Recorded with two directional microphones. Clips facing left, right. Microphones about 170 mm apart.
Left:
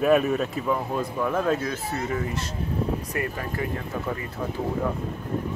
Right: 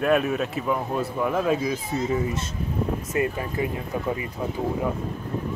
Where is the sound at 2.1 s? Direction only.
20° right (ahead or behind).